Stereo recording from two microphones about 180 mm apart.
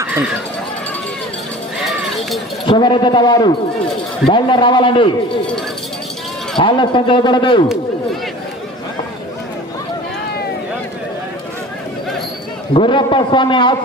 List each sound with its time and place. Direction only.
2.6 s a man's voice: 25° left (ahead or behind)
6.6 s a man's voice: 25° left (ahead or behind)
12.7 s a man's voice: 30° left (ahead or behind)